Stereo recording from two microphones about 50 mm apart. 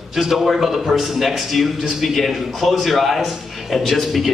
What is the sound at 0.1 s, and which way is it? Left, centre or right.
A man's voice, centre.